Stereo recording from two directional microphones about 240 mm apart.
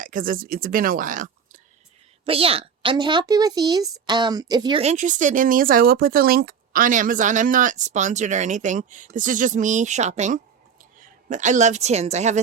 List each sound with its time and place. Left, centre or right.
0.0 s a woman's voice: right